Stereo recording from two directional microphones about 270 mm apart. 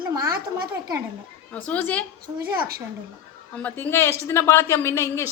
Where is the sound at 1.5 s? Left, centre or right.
Centre.